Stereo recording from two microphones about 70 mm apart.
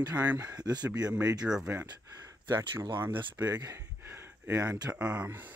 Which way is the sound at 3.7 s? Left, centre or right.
Right.